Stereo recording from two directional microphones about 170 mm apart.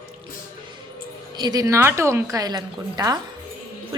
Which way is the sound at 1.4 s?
25° right (ahead or behind).